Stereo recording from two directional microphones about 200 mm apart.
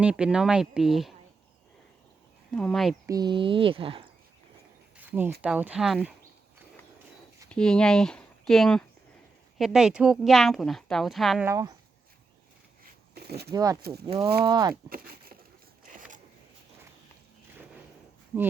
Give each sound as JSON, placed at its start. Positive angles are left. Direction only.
{"t": 0.0, "sound": "a woman's voice", "side_deg": -5}
{"t": 2.5, "sound": "a woman's voice", "side_deg": 5}
{"t": 3.1, "sound": "speech", "side_deg": -20}
{"t": 4.9, "sound": "speech", "side_deg": -10}
{"t": 7.5, "sound": "a woman's voice", "side_deg": 5}
{"t": 11.4, "sound": "speech", "side_deg": -15}
{"t": 12.8, "sound": "a sound", "side_deg": -55}
{"t": 13.5, "sound": "speech", "side_deg": -15}
{"t": 14.8, "sound": "speech", "side_deg": -45}
{"t": 15.9, "sound": "a sound", "side_deg": -40}